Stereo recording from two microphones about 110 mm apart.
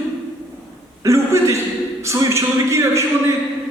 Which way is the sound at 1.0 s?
25° right (ahead or behind).